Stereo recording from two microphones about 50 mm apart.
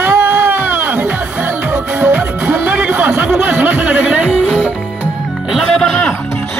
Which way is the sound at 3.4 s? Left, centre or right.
Right.